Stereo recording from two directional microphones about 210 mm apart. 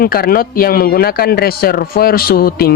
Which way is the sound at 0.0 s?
45° left (ahead or behind).